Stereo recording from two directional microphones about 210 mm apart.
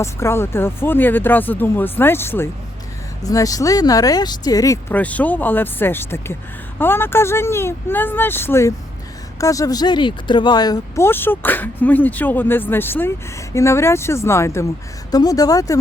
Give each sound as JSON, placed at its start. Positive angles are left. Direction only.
{"t": 0.0, "sound": "speech", "side_deg": 10}